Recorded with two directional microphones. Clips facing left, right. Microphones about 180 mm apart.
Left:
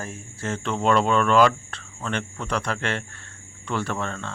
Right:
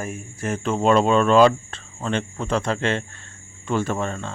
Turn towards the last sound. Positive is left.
turn(degrees=-15)  # may be behind; listen again after turning